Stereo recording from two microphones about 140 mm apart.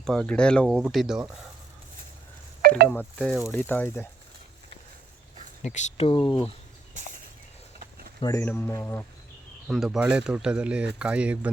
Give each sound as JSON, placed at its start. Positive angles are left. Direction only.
{"t": 0.0, "sound": "speech", "side_deg": 5}
{"t": 2.6, "sound": "telephone dialing", "side_deg": -90}
{"t": 2.9, "sound": "speech", "side_deg": 15}
{"t": 3.2, "sound": "speech", "side_deg": -5}
{"t": 3.5, "sound": "speech", "side_deg": 15}
{"t": 5.6, "sound": "speech", "side_deg": 55}
{"t": 6.1, "sound": "speech", "side_deg": 35}
{"t": 8.2, "sound": "speech", "side_deg": 25}
{"t": 8.4, "sound": "speech", "side_deg": 15}
{"t": 9.6, "sound": "speech", "side_deg": 0}